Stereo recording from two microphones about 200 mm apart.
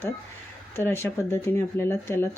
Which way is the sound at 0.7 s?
10° left (ahead or behind).